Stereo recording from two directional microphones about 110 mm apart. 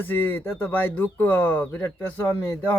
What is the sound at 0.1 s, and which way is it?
Speech, 20° left (ahead or behind).